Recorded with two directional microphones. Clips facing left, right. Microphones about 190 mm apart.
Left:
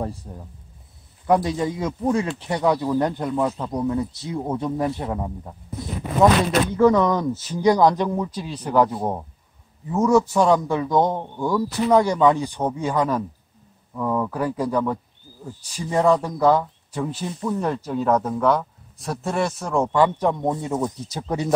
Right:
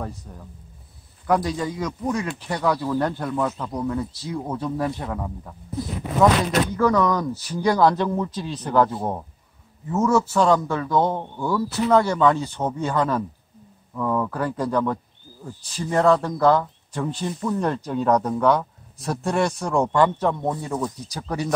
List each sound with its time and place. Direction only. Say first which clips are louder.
0.0 s speech: left 4 dB; 30° left (ahead or behind)
6.8 s speech: left 4 dB; 25° left (ahead or behind)